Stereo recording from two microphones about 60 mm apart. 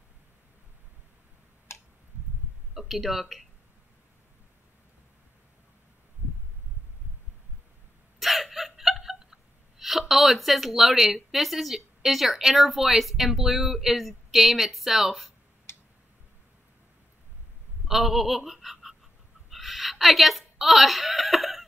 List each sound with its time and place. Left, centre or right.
2.7 s speech: centre
8.2 s gasp: centre
11.1 s speech: centre
15.7 s tick-tock: left
17.8 s a woman's voice: centre